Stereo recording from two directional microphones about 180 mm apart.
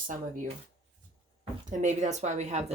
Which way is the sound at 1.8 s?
40° right (ahead or behind).